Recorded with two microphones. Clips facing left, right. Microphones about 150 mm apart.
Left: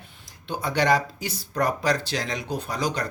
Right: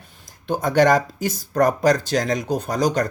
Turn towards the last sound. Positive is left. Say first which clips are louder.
# right 7 dB
turn(degrees=-45)  # may be behind; listen again after turning